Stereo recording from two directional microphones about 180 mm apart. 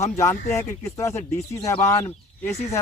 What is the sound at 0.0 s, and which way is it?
Speech, 15° left (ahead or behind).